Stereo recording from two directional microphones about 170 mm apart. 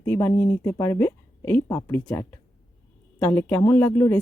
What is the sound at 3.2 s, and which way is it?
Speech, 10° left (ahead or behind).